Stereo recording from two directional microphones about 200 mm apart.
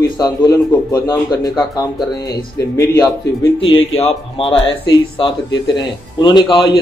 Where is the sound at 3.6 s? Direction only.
30° left (ahead or behind).